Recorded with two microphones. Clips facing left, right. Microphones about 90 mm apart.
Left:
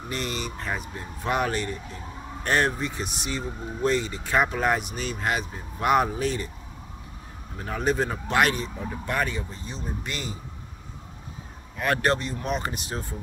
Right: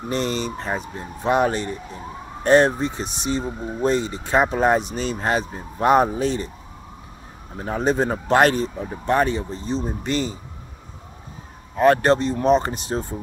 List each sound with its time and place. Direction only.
0.1 s speech: 30° right (ahead or behind)
7.5 s speech: 30° right (ahead or behind)
11.7 s speech: 30° right (ahead or behind)